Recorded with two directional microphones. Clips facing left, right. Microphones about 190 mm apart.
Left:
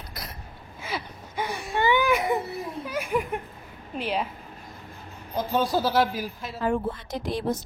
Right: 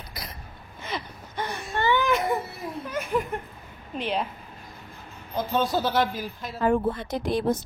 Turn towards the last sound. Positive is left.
turn(degrees=-55)  # may be behind; listen again after turning